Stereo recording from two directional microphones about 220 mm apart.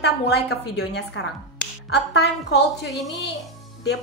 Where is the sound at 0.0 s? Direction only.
50° left (ahead or behind).